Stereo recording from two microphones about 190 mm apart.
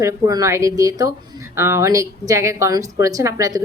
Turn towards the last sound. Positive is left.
turn(degrees=-15)  # may be behind; listen again after turning